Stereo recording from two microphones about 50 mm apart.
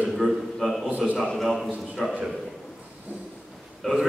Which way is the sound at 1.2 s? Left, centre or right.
Centre.